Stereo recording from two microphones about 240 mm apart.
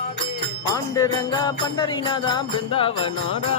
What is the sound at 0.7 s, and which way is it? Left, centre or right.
Music, centre.